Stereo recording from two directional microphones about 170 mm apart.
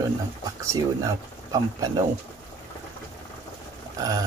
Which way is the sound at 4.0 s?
20° right (ahead or behind).